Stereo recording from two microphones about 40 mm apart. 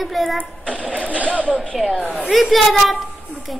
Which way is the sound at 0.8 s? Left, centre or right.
Right.